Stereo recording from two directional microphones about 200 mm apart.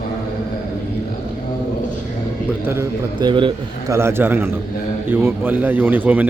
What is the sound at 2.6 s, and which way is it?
A man's voice, 15° right (ahead or behind).